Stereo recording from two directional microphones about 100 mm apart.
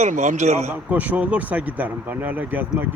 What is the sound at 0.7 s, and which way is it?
Speech, 15° right (ahead or behind).